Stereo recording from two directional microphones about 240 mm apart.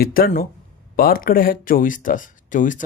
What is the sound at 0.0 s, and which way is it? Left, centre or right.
Speech, left.